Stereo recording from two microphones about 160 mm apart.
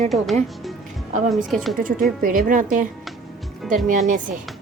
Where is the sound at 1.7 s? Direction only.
60° right (ahead or behind).